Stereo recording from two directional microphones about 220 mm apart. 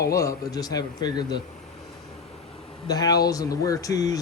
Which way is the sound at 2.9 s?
15° left (ahead or behind).